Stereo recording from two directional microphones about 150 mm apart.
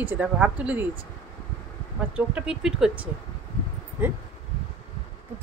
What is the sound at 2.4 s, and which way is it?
Speech, 5° right (ahead or behind).